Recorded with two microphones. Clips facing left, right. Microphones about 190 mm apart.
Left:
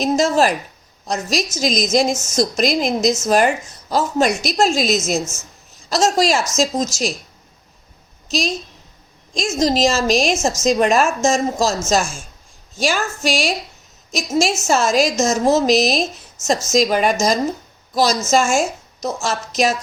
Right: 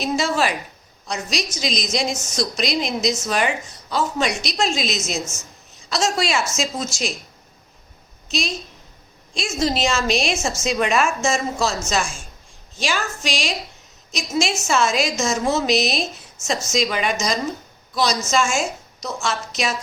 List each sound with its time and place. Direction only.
0.0 s a woman's voice: 40° left (ahead or behind)
9.3 s a woman's voice: 40° left (ahead or behind)